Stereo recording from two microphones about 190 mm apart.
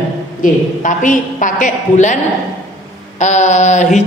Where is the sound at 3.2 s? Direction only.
40° left (ahead or behind).